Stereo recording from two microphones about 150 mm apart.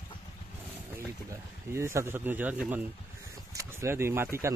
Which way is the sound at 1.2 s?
20° right (ahead or behind).